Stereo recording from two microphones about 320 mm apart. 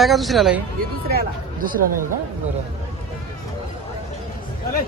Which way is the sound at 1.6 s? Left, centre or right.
Right.